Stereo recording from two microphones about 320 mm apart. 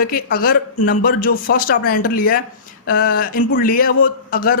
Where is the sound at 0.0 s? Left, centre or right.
Left.